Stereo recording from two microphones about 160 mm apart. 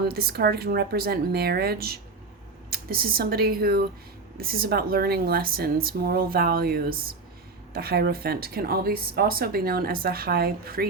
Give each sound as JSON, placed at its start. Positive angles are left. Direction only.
{"t": 0.1, "sound": "speech", "side_deg": -75}